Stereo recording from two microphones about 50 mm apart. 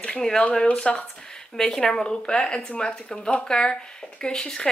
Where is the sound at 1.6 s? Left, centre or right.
Centre.